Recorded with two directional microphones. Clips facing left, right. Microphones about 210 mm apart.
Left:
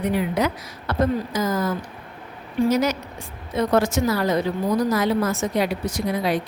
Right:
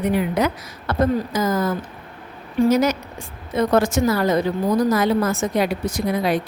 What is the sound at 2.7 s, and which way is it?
A woman's voice, 50° right (ahead or behind).